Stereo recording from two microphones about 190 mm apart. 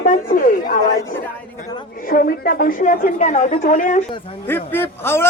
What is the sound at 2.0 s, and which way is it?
A woman's voice, 50° left (ahead or behind).